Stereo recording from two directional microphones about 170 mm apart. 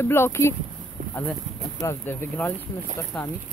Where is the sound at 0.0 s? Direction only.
15° left (ahead or behind).